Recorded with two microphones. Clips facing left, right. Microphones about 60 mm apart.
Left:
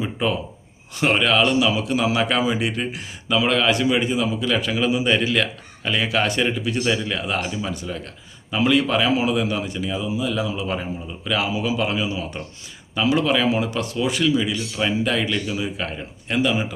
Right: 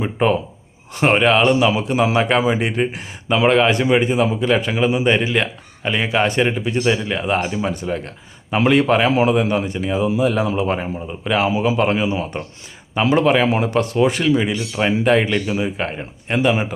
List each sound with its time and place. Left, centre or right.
0.0 s a man's voice: right
10.1 s a man's voice: right
14.5 s a man's voice: right